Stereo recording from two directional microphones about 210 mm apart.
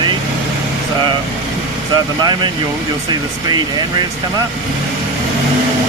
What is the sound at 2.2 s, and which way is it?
Speech, 20° right (ahead or behind).